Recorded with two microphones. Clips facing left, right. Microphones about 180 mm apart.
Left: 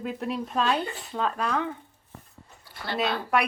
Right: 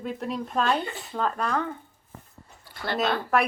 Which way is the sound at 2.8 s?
55° right (ahead or behind).